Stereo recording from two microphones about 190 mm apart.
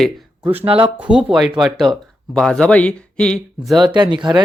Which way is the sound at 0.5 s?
30° right (ahead or behind).